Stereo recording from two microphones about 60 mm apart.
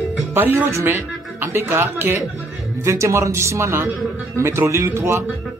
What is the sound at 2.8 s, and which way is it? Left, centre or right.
A woman's voice, right.